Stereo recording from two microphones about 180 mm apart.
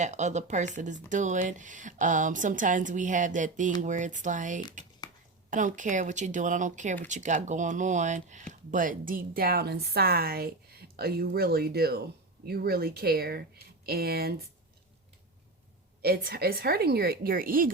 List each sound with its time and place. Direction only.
0.0 s speech: 40° right (ahead or behind); by 14.4 s 60° right (ahead or behind)
16.0 s speech: 60° right (ahead or behind)